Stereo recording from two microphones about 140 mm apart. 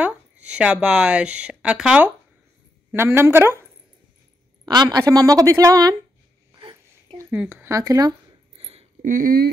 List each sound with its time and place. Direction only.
0.0 s a woman's voice: 10° right (ahead or behind)
4.6 s a woman's voice: 30° right (ahead or behind)
7.2 s a woman's voice: 15° right (ahead or behind)
8.5 s a sound: 45° right (ahead or behind)
9.0 s speech: 80° right